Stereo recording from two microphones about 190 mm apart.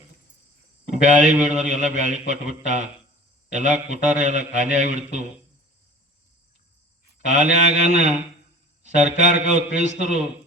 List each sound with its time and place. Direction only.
0.9 s a man's voice: 40° right (ahead or behind)
7.3 s a man's voice: 40° right (ahead or behind)